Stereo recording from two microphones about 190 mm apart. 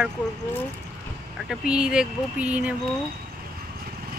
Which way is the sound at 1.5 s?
5° right (ahead or behind).